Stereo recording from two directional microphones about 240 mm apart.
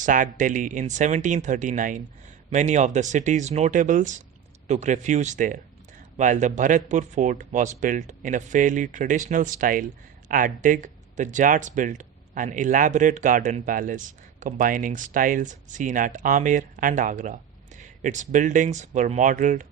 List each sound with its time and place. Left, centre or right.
0.0 s speech: right